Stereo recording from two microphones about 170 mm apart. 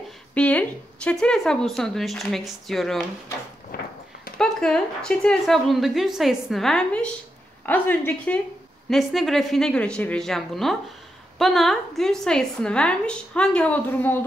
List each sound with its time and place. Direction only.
0.3 s a woman's voice: 10° left (ahead or behind)
4.4 s a woman's voice: 5° left (ahead or behind)